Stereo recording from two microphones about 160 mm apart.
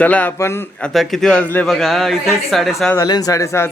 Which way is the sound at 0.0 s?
10° left (ahead or behind).